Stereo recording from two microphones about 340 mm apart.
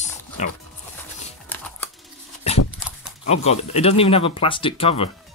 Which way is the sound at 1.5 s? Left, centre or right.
Centre.